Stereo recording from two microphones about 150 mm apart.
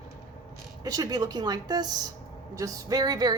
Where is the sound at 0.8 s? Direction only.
25° right (ahead or behind).